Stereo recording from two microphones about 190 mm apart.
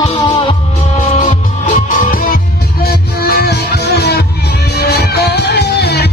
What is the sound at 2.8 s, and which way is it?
Music, 55° left (ahead or behind).